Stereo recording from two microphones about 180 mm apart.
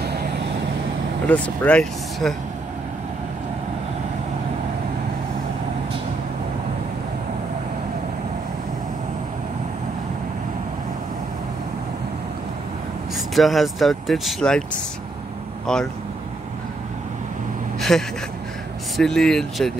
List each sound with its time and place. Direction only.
0.0 s vehicle: 65° right (ahead or behind)
1.3 s speech: 5° left (ahead or behind)
13.3 s speech: centre (ahead or behind)
15.6 s speech: 5° left (ahead or behind)
17.7 s vehicle: centre (ahead or behind)
18.9 s speech: centre (ahead or behind)